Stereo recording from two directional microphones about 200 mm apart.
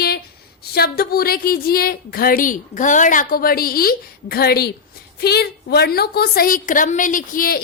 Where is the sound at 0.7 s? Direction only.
50° left (ahead or behind).